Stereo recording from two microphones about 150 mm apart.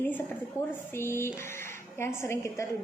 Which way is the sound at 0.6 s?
15° right (ahead or behind).